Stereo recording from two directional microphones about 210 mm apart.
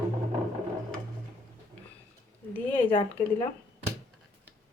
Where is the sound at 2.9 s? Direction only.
25° left (ahead or behind).